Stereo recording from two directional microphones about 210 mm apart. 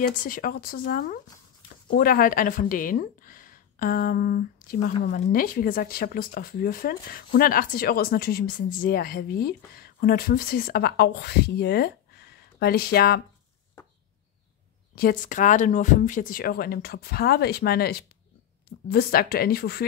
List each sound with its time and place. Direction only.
0.1 s speech: 40° left (ahead or behind)
15.0 s speech: 40° left (ahead or behind)